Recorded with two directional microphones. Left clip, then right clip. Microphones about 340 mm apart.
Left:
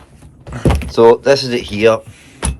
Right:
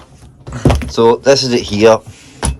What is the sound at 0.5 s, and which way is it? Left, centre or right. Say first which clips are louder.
Speech: even; centre.